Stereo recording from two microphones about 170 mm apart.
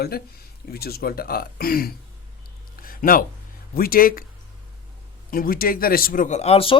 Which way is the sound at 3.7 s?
60° left (ahead or behind).